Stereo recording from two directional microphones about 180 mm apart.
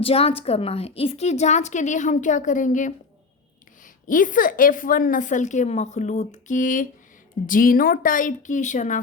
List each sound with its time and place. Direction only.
0.0 s a woman's voice: 35° left (ahead or behind)
4.0 s a woman's voice: 50° left (ahead or behind)